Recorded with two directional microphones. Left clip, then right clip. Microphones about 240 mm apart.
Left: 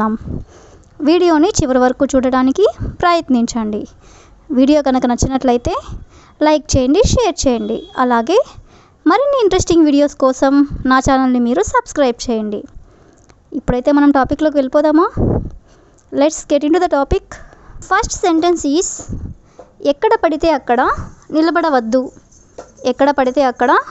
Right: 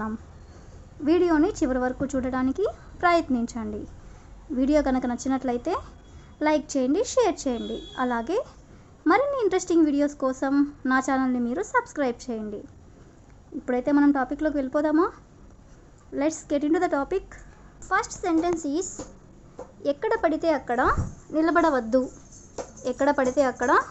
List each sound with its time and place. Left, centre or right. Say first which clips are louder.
0.0 s speech: left 15 dB; left
13.7 s speech: left 10 dB; left